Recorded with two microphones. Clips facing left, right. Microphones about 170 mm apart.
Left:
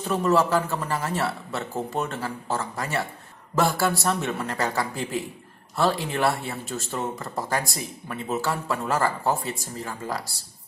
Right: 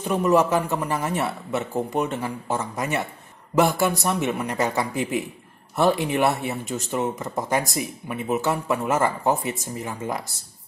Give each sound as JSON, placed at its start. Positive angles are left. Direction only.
{"t": 0.0, "sound": "speech", "side_deg": -15}